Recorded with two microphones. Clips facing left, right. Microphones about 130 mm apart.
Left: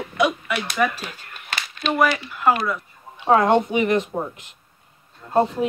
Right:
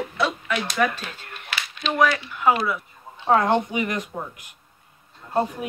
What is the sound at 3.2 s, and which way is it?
Speech, 20° left (ahead or behind).